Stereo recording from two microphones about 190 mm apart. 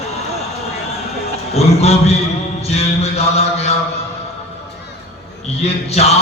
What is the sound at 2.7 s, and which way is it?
Music, 35° left (ahead or behind).